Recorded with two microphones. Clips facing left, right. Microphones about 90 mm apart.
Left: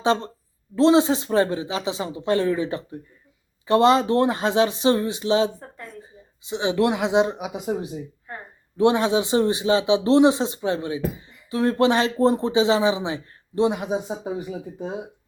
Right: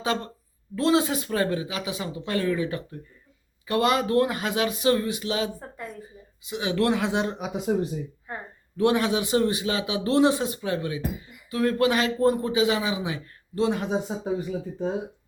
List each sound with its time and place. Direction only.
0.0 s speech: 25° left (ahead or behind)
5.5 s a sound: 5° right (ahead or behind)
6.5 s speech: 25° left (ahead or behind)
8.3 s speech: 5° right (ahead or behind)
8.8 s speech: 25° left (ahead or behind)